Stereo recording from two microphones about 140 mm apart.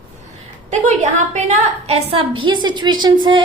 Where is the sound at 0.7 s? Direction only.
60° right (ahead or behind).